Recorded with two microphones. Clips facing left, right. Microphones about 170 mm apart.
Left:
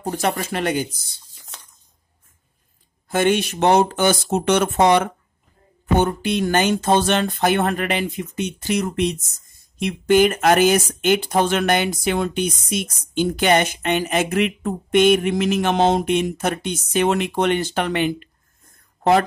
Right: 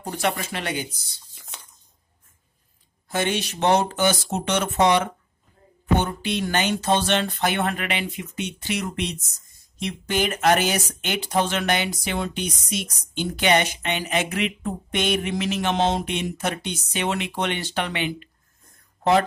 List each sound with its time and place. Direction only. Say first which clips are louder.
0.0 s speech: left 3 dB; 40° left (ahead or behind)
3.1 s speech: left 7 dB; 55° left (ahead or behind)